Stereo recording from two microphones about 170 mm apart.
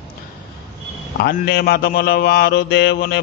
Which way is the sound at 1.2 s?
70° left (ahead or behind).